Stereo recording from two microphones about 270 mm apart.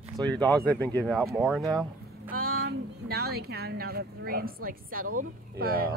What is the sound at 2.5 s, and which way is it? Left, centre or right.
A woman's voice, right.